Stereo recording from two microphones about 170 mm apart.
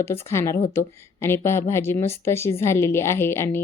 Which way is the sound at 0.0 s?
15° left (ahead or behind).